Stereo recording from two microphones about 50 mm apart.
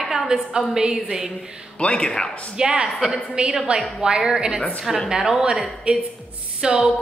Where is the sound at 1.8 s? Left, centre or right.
Centre.